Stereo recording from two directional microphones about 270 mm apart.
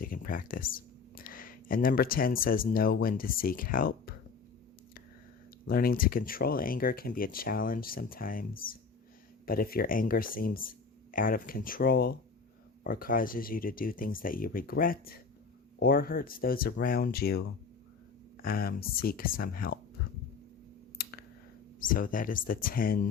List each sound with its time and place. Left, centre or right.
0.0 s speech: left
5.6 s speech: left
18.4 s speech: left
21.0 s clicking: left
21.8 s speech: left